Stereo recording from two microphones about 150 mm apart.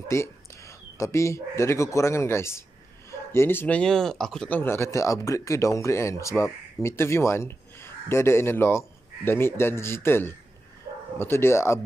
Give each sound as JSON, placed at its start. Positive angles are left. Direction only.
{"t": 0.1, "sound": "speech", "side_deg": 20}